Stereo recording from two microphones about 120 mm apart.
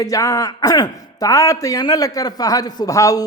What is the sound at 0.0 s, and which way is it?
Speech, 30° left (ahead or behind).